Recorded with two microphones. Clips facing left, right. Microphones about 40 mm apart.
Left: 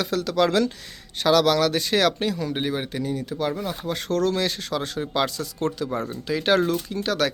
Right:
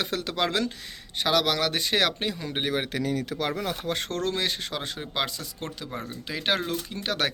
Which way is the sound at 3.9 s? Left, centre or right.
Right.